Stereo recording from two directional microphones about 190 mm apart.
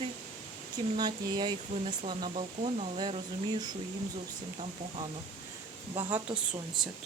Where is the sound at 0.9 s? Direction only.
20° right (ahead or behind).